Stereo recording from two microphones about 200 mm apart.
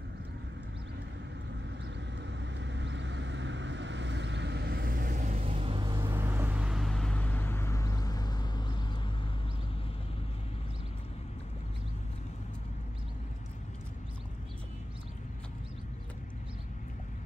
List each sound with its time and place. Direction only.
2.1 s vehicle: 65° right (ahead or behind); by 6.1 s 20° right (ahead or behind)
6.1 s vehicle: 10° right (ahead or behind); by 9.1 s 20° left (ahead or behind)